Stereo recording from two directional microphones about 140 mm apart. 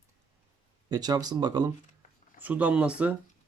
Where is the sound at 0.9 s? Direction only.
30° right (ahead or behind).